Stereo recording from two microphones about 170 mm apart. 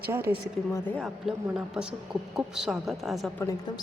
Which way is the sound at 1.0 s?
5° right (ahead or behind).